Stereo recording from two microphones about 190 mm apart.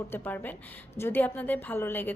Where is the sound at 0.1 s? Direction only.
10° left (ahead or behind).